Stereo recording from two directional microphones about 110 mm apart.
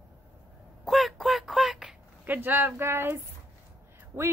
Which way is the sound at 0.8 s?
Centre (ahead or behind).